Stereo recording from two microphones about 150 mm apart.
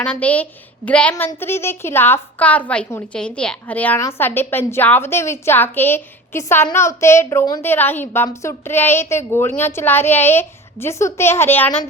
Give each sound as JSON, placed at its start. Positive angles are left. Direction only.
{"t": 0.0, "sound": "a woman's voice", "side_deg": 10}
{"t": 7.6, "sound": "a woman's voice", "side_deg": 15}